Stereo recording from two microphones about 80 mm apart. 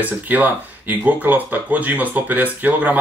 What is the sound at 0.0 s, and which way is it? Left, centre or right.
Speech, right.